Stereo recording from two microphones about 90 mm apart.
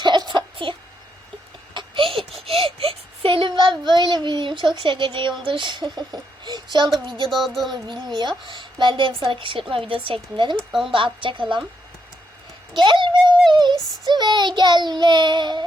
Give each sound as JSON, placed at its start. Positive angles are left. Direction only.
{"t": 0.0, "sound": "a sound", "side_deg": -55}
{"t": 1.7, "sound": "a sound", "side_deg": -75}
{"t": 2.4, "sound": "baby cry", "side_deg": -90}
{"t": 5.5, "sound": "child singing", "side_deg": -65}
{"t": 7.3, "sound": "music", "side_deg": 0}
{"t": 7.7, "sound": "child singing", "side_deg": -55}
{"t": 8.4, "sound": "a woman's voice", "side_deg": -60}
{"t": 10.7, "sound": "music", "side_deg": -5}
{"t": 10.9, "sound": "a woman's voice", "side_deg": -70}
{"t": 12.7, "sound": "child singing", "side_deg": -65}